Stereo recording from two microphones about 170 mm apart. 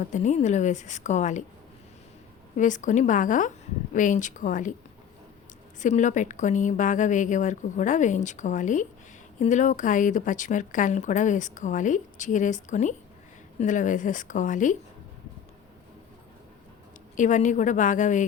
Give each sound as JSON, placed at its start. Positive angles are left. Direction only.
{"t": 0.0, "sound": "speech", "side_deg": 45}
{"t": 2.6, "sound": "speech", "side_deg": 50}
{"t": 5.8, "sound": "speech", "side_deg": 45}
{"t": 17.2, "sound": "speech", "side_deg": 45}